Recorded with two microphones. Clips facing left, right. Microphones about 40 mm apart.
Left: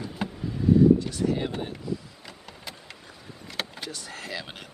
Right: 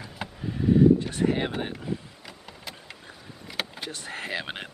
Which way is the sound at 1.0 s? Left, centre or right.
Right.